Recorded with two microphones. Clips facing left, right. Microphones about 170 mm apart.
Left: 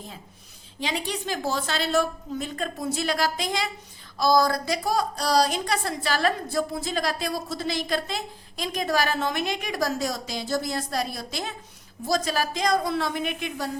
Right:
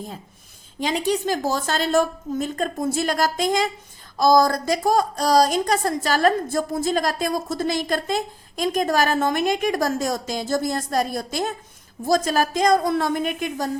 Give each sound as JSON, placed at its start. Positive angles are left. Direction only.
{"t": 0.8, "sound": "a woman's voice", "side_deg": -45}